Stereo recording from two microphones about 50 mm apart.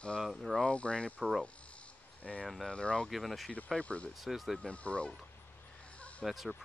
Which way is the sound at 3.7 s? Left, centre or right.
Left.